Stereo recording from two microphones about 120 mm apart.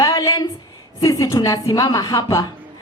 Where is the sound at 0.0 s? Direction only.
30° left (ahead or behind).